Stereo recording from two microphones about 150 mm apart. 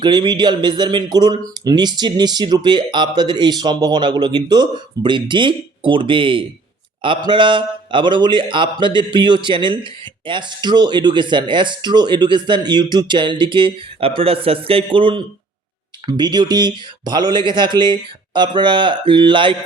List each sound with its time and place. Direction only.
0.0 s a man's voice: 30° right (ahead or behind)